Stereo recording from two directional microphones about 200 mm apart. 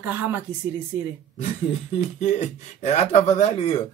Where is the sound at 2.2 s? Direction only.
35° left (ahead or behind).